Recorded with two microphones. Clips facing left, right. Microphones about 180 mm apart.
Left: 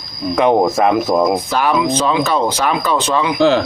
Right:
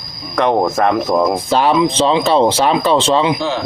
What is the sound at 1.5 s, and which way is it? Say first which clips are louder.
Speech: right 2 dB; 25° right (ahead or behind).